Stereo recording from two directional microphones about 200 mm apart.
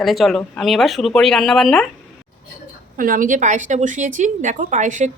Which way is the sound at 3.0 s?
45° right (ahead or behind).